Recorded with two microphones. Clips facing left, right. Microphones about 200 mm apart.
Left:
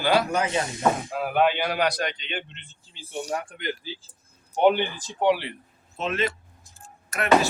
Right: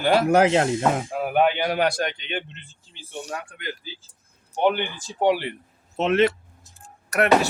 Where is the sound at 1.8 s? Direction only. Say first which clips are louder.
Right 2 dB; 50° right (ahead or behind).